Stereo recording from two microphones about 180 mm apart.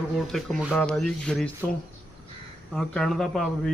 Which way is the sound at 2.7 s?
5° left (ahead or behind).